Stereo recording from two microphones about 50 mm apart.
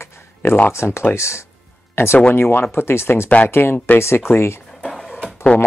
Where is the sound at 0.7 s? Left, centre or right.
Left.